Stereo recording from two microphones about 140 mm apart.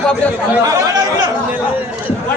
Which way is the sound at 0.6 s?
25° right (ahead or behind).